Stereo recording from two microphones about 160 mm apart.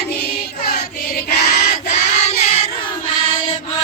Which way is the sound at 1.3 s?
80° left.